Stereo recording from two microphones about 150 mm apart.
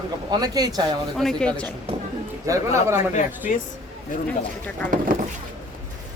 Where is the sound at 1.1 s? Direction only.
5° left (ahead or behind).